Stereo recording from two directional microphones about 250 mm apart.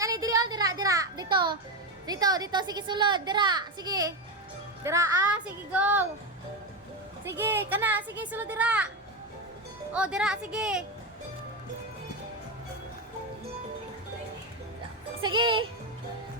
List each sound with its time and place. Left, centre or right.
0.0 s a sound: centre
2.0 s a child's voice: centre
7.3 s a child's voice: centre
9.9 s a woman's voice: centre
15.2 s speech: centre